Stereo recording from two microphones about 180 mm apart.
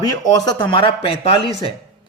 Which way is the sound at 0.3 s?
20° left (ahead or behind).